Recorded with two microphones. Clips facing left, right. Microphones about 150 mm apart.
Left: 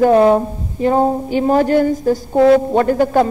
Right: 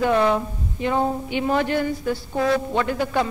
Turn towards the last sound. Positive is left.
turn(degrees=45)  # may be behind; listen again after turning